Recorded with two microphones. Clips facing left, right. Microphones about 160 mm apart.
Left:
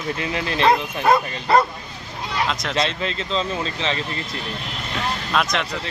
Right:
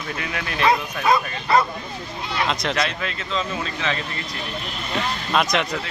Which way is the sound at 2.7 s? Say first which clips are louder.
Left 2 dB; 25° left (ahead or behind).